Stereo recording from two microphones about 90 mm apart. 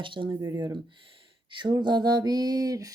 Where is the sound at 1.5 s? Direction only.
55° right (ahead or behind); by 2.9 s 40° right (ahead or behind).